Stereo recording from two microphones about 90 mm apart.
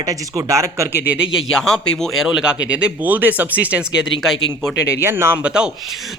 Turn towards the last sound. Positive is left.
turn(degrees=-10)  # may be behind; listen again after turning